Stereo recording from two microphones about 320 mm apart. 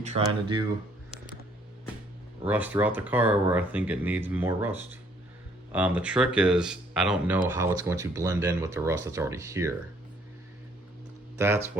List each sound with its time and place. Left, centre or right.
0.0 s speech: centre
2.5 s speech: centre
11.3 s speech: centre